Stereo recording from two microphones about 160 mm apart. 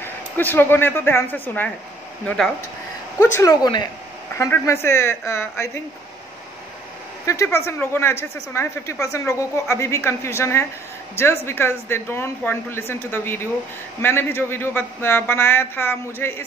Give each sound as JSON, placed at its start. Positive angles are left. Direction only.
{"t": 0.0, "sound": "speech", "side_deg": 10}
{"t": 3.2, "sound": "a man's voice", "side_deg": 20}
{"t": 7.2, "sound": "a man's voice", "side_deg": 15}